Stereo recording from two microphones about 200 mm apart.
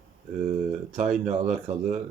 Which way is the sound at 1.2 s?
35° right (ahead or behind).